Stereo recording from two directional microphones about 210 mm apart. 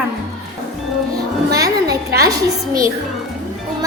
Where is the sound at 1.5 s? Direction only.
15° right (ahead or behind).